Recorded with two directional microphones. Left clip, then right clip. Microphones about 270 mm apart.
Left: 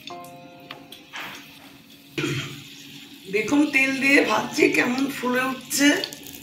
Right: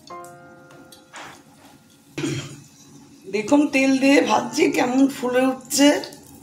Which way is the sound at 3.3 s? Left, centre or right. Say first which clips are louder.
Right 2 dB; right.